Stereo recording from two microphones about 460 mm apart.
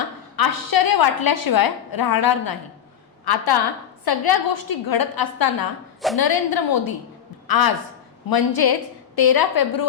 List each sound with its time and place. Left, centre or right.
0.3 s a woman's voice: left